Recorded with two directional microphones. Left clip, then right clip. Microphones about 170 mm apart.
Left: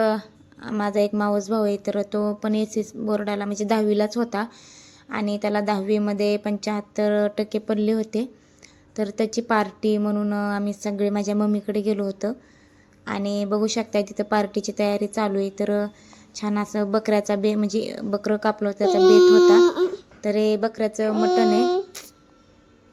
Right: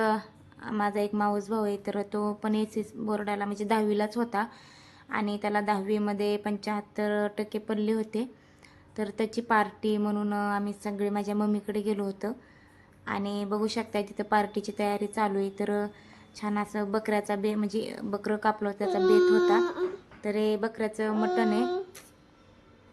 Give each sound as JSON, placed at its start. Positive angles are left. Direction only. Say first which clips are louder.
{"t": 0.0, "sound": "a woman's voice", "louder": "left 5 dB", "side_deg": 15}
{"t": 18.9, "sound": "a child's voice", "louder": "left 9 dB", "side_deg": 90}
{"t": 20.2, "sound": "a woman's voice", "louder": "left 7 dB", "side_deg": 20}